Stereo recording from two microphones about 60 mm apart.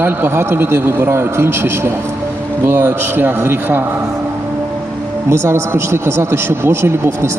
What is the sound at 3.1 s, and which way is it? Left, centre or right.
Speech, right.